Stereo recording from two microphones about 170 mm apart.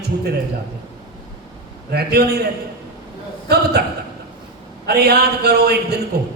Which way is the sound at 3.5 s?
70° right (ahead or behind).